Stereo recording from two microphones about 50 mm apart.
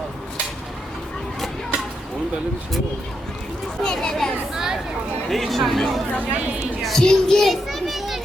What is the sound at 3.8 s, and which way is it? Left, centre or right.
Child singing, centre.